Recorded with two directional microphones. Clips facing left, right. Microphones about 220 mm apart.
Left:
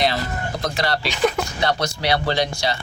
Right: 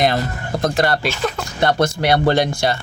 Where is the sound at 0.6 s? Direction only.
50° right (ahead or behind).